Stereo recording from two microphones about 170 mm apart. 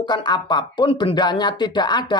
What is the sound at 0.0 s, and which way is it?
Speech, 25° left (ahead or behind).